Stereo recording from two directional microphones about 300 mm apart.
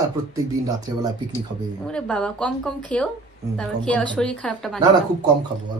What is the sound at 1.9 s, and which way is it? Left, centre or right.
A woman's voice, centre.